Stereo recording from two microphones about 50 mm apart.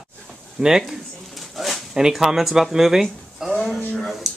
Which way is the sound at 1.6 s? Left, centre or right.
Centre.